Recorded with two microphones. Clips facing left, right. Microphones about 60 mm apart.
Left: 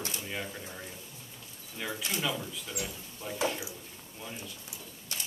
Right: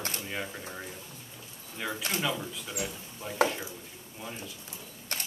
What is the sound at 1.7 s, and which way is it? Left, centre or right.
Speech, centre.